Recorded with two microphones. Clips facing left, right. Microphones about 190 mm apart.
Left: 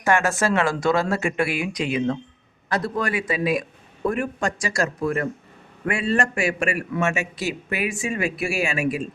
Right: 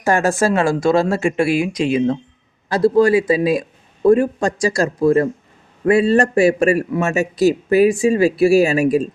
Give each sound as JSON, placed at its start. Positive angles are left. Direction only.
{"t": 0.0, "sound": "a man's voice", "side_deg": -35}